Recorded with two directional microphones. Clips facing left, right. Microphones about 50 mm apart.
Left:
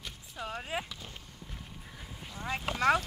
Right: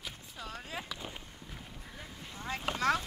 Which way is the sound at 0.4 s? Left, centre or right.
Left.